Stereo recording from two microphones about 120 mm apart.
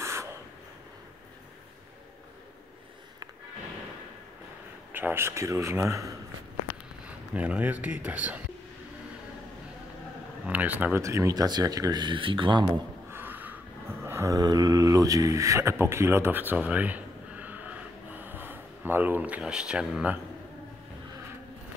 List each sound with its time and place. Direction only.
0.0 s a sound: 25° right (ahead or behind)
4.9 s a man's voice: 20° right (ahead or behind)
7.1 s speech: 10° right (ahead or behind)
10.4 s speech: 15° right (ahead or behind); by 12.6 s 40° right (ahead or behind)
13.1 s a sound: 15° right (ahead or behind)
14.0 s speech: 25° right (ahead or behind); by 20.2 s 5° right (ahead or behind)